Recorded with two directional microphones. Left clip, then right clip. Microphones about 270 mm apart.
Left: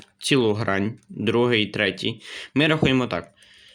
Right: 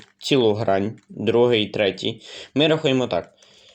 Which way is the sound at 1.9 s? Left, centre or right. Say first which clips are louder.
Right 2 dB; left.